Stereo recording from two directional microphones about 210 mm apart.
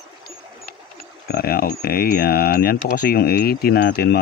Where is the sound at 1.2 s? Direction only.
45° left (ahead or behind).